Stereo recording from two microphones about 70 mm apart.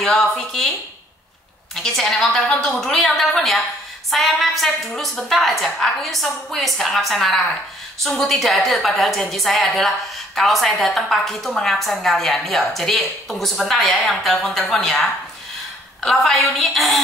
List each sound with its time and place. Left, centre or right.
0.0 s speech: centre
1.8 s a woman's voice: centre